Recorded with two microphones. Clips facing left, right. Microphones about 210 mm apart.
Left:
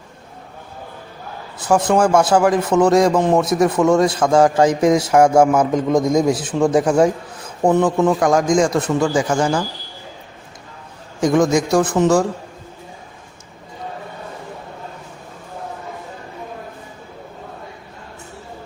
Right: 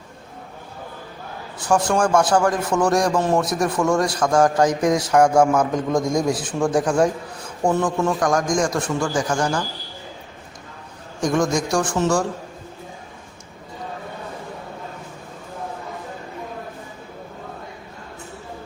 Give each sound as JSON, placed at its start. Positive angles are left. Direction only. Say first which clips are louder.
{"t": 1.6, "sound": "a man's voice", "louder": "left 4 dB", "side_deg": 20}
{"t": 11.2, "sound": "a man's voice", "louder": "left 5 dB", "side_deg": 20}